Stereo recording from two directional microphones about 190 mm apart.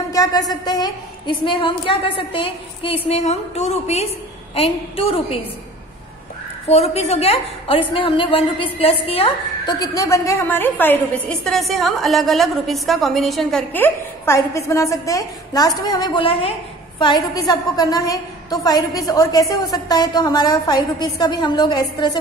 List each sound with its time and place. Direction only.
0.1 s a woman's voice: 20° left (ahead or behind)
6.7 s a woman's voice: 35° left (ahead or behind)
9.8 s a woman's voice: 15° left (ahead or behind)